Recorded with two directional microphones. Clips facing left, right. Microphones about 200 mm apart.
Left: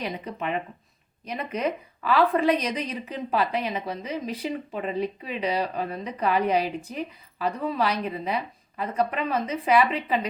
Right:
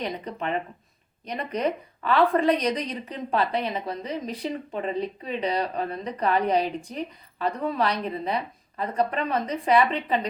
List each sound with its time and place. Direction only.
0.0 s a woman's voice: 5° left (ahead or behind)
5.4 s a woman's voice: 5° left (ahead or behind)